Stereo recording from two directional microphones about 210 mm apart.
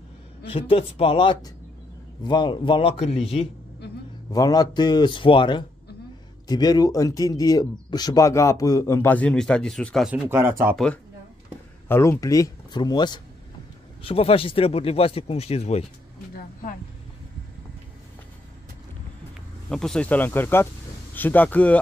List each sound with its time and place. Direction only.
0.5 s speech: 25° left (ahead or behind)
4.3 s speech: 15° left (ahead or behind); by 10.8 s 10° right (ahead or behind)
11.9 s speech: 15° left (ahead or behind); by 15.8 s 30° left (ahead or behind)
19.7 s speech: 5° left (ahead or behind)